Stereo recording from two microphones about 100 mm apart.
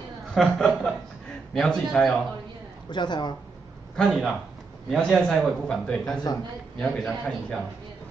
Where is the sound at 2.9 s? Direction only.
45° left (ahead or behind).